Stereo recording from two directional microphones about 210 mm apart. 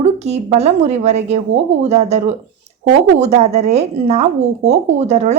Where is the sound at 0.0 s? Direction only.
30° right (ahead or behind).